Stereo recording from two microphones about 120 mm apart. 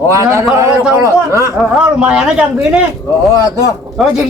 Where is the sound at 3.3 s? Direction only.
35° right (ahead or behind).